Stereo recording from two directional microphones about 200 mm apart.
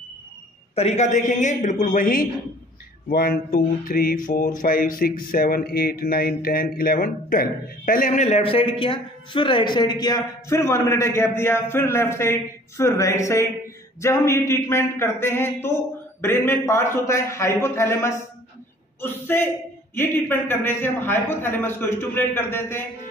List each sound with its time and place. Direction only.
0.7 s a man's voice: 35° left (ahead or behind)
3.1 s a sound: 45° left (ahead or behind)
5.3 s a man's voice: 45° left (ahead or behind); by 22.8 s 10° left (ahead or behind)